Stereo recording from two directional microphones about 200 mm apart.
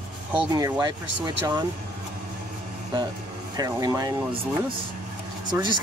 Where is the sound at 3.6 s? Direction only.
15° right (ahead or behind).